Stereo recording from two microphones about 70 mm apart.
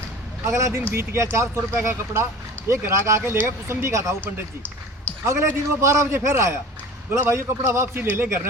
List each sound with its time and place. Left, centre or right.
0.4 s a man's voice: right
4.2 s speech: left
5.2 s a man's voice: right